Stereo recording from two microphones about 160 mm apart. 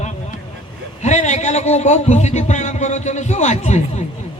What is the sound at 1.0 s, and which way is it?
A man's voice, 45° left (ahead or behind).